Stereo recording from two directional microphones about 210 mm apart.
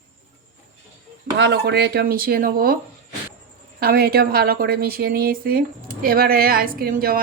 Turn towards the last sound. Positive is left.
turn(degrees=-45)  # may be behind; listen again after turning